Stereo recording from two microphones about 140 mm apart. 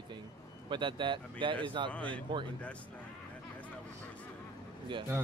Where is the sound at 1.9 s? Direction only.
10° left (ahead or behind).